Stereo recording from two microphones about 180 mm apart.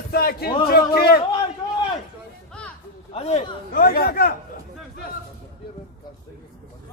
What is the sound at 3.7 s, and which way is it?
Speech, 55° left (ahead or behind).